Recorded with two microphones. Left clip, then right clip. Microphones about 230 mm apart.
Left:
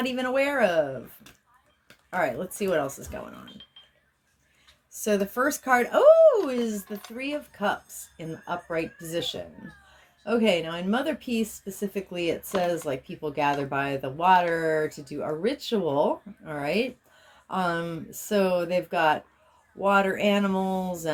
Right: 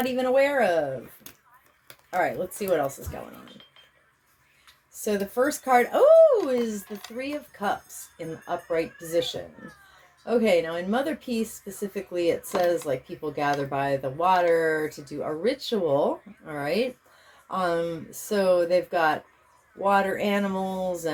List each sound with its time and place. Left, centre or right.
0.0 s speech: left
2.1 s speech: left
5.0 s speech: left